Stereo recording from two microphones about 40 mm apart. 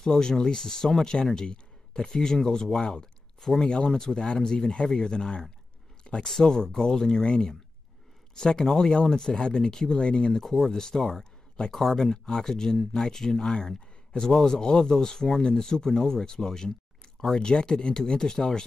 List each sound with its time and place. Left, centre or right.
0.0 s speech: centre
10.4 s speech: centre